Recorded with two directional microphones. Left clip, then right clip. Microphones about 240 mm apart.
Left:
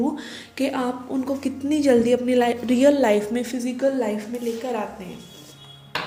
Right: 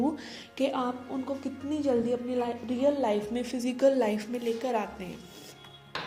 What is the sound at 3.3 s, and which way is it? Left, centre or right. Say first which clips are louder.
Speech: left 6 dB; centre.